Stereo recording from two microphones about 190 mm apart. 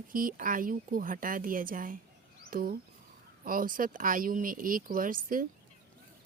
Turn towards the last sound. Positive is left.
turn(degrees=-45)  # may be behind; listen again after turning